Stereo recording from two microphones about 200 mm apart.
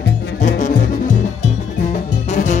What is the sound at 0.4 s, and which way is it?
Music, 40° left (ahead or behind).